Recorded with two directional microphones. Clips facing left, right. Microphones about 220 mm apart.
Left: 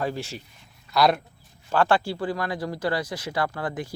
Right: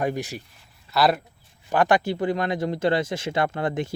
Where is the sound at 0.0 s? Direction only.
15° right (ahead or behind).